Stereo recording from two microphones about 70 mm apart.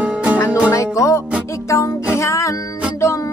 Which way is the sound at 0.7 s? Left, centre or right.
Left.